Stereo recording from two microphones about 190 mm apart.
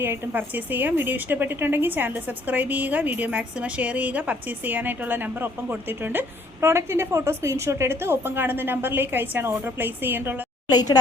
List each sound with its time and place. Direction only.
0.0 s a woman's voice: 10° right (ahead or behind)
10.7 s a woman's voice: 20° left (ahead or behind)